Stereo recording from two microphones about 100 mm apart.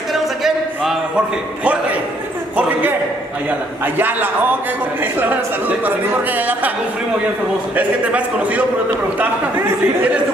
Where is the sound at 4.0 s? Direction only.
20° right (ahead or behind).